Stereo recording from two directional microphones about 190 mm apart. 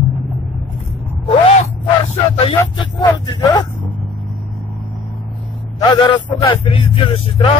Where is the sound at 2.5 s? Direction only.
20° left (ahead or behind).